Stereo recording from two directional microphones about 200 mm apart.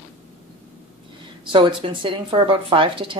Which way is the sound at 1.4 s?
25° right (ahead or behind).